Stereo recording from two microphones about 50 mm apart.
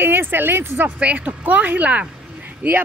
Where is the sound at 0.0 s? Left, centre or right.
Right.